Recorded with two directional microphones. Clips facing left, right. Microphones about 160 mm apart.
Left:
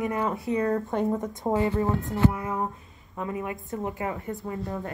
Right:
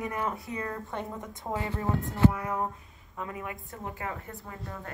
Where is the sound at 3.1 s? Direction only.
25° left (ahead or behind).